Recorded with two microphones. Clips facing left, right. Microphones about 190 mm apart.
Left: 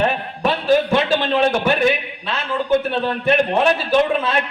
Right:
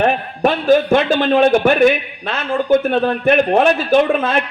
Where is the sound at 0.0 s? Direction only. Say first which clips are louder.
Right 4 dB; 50° right (ahead or behind).